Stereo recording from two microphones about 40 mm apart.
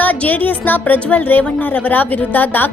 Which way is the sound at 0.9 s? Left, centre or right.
Left.